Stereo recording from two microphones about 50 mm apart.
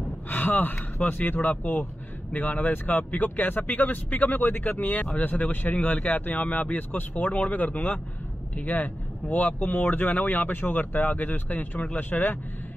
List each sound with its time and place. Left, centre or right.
0.3 s speech: left